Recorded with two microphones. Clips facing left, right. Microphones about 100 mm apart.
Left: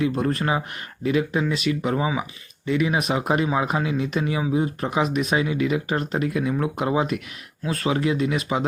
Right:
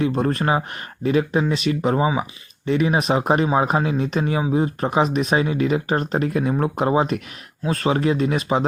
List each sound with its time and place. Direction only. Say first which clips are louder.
0.0 s speech: right 2 dB; 30° right (ahead or behind)